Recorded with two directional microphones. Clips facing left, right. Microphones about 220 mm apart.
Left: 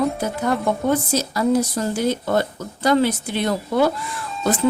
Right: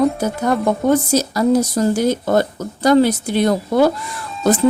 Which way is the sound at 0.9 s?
40° right (ahead or behind).